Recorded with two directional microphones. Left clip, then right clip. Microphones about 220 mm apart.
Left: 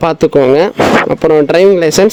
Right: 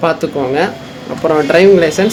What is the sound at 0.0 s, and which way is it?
Speech, 45° left (ahead or behind).